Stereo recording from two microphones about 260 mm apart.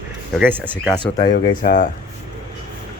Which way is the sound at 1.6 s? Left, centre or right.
Left.